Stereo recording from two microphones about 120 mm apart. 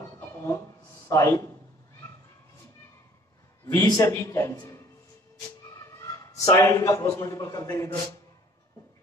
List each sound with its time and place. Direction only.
0.2 s a sound: 25° left (ahead or behind)
1.0 s a man's voice: 25° left (ahead or behind)
3.8 s a man's voice: 30° left (ahead or behind)